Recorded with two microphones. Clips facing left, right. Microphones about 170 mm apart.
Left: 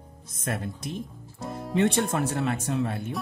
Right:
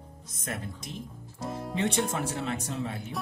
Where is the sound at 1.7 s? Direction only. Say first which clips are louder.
Left 6 dB; 60° left (ahead or behind).